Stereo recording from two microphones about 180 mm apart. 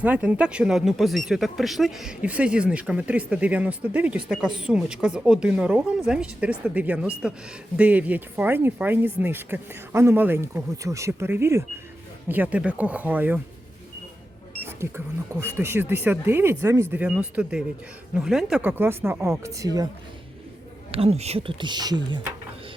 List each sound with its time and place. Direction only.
0.0 s speech: 10° right (ahead or behind)
14.6 s speech: 15° right (ahead or behind)
20.9 s speech: 35° right (ahead or behind)